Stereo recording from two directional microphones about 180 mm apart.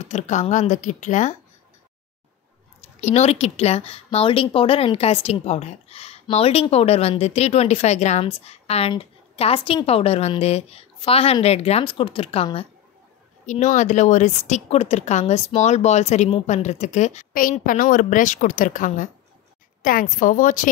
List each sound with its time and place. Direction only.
0.1 s a woman's voice: 40° left (ahead or behind)
3.0 s a woman's voice: 40° left (ahead or behind)
13.5 s a woman's voice: 40° left (ahead or behind)